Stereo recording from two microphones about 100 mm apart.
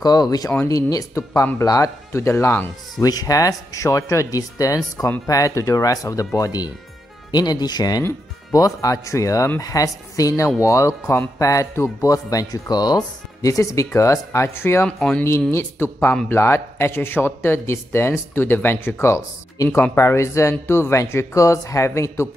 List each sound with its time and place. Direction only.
0.0 s speech: 40° left (ahead or behind); by 2.7 s 20° left (ahead or behind)
3.0 s speech: 40° left (ahead or behind)
14.9 s speech: 10° left (ahead or behind)
15.5 s speech: 25° left (ahead or behind)